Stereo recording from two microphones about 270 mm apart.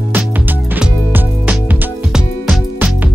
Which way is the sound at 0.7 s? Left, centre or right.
Centre.